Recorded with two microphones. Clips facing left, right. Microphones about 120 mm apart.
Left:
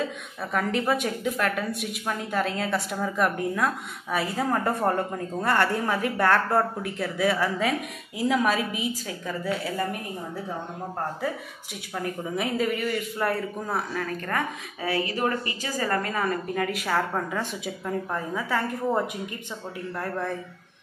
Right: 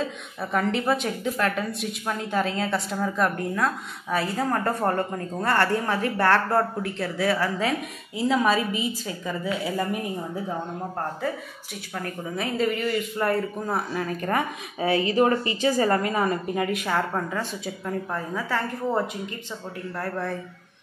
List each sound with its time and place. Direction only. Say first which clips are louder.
0.4 s a man's voice: right 2 dB; centre (ahead or behind)
11.9 s a man's voice: left 2 dB; 10° left (ahead or behind)
13.9 s a woman's voice: right 3 dB; 20° right (ahead or behind)
16.7 s a man's voice: right 1 dB; 5° left (ahead or behind)